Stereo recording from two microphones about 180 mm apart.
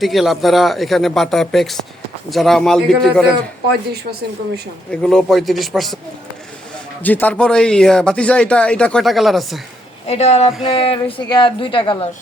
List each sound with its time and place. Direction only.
0.0 s a man's voice: centre (ahead or behind)
4.9 s a man's voice: centre (ahead or behind)
7.0 s a man's voice: 10° left (ahead or behind)
10.1 s speech: 35° left (ahead or behind)